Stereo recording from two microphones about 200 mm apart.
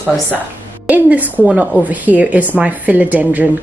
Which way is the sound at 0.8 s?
10° right (ahead or behind).